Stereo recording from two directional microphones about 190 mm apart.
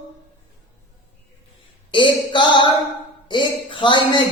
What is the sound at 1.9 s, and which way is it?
A man's voice, 25° left (ahead or behind).